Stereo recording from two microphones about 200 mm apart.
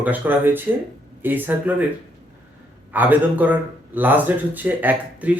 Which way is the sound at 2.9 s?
10° right (ahead or behind).